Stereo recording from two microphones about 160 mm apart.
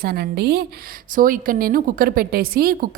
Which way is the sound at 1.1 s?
60° right (ahead or behind).